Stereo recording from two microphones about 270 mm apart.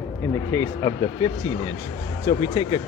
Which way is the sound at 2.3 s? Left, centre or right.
Centre.